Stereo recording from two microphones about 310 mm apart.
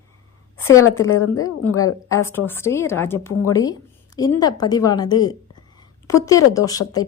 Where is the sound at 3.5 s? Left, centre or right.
Centre.